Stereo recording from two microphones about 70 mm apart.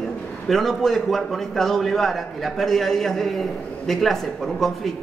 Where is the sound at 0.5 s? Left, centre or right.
Centre.